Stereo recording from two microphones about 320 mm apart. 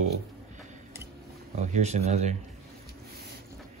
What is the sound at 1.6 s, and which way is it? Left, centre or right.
Speech, right.